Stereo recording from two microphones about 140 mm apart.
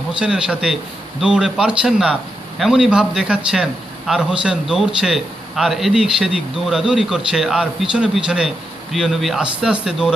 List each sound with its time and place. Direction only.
0.2 s a man's voice: 5° right (ahead or behind)